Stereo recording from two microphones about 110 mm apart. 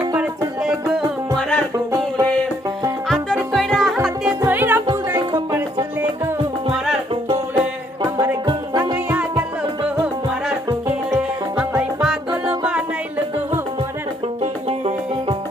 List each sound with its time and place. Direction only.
0.2 s music: 5° right (ahead or behind)
1.4 s music: 10° left (ahead or behind)
3.5 s music: 5° left (ahead or behind)
4.4 s music: 15° right (ahead or behind)
8.0 s music: 25° right (ahead or behind)
11.8 s music: 5° right (ahead or behind)
14.7 s music: 60° right (ahead or behind)